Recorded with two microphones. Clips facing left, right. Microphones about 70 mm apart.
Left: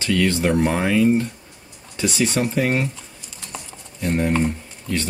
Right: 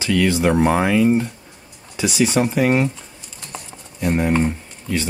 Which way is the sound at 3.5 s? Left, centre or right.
Centre.